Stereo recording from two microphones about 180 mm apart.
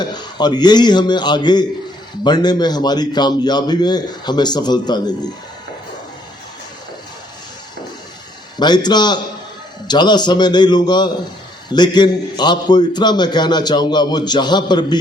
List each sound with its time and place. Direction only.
0.0 s a man's voice: 25° left (ahead or behind)
8.5 s a man's voice: 25° left (ahead or behind)